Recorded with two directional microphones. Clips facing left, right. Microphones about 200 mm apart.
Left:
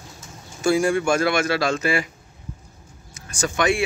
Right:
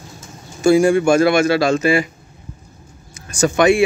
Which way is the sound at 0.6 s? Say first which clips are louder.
Right 7 dB; 5° right (ahead or behind).